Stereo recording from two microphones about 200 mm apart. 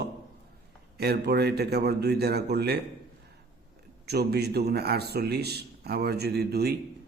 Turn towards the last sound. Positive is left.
turn(degrees=-55)  # may be behind; listen again after turning